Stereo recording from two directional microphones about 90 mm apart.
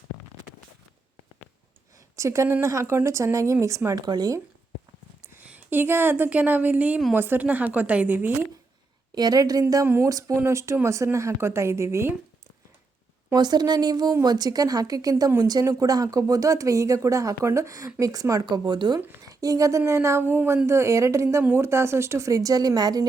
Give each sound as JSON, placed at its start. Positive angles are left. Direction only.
{"t": 2.1, "sound": "speech", "side_deg": -35}
{"t": 4.0, "sound": "speech", "side_deg": -50}
{"t": 5.2, "sound": "a woman's voice", "side_deg": -15}
{"t": 9.1, "sound": "speech", "side_deg": -45}
{"t": 9.8, "sound": "speech", "side_deg": -25}
{"t": 10.1, "sound": "speech", "side_deg": -40}
{"t": 13.3, "sound": "speech", "side_deg": -50}
{"t": 19.2, "sound": "speech", "side_deg": -40}